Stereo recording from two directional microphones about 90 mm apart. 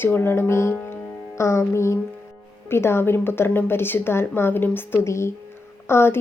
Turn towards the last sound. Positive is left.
turn(degrees=30)  # may be behind; listen again after turning